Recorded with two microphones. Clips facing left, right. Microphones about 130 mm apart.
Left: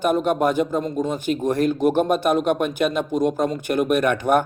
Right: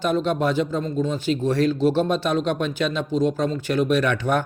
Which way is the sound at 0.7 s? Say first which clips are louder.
Left 1 dB; 15° left (ahead or behind).